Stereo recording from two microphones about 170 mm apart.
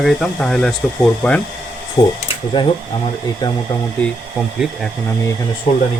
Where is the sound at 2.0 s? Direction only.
25° left (ahead or behind).